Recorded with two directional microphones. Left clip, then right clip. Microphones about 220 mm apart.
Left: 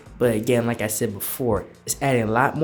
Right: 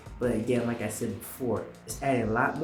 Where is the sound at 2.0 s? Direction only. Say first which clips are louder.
Left 7 dB; 55° left (ahead or behind).